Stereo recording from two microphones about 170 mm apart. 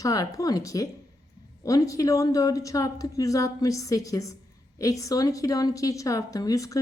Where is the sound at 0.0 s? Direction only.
20° left (ahead or behind).